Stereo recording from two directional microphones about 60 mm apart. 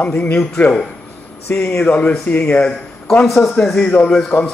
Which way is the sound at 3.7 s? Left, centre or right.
Centre.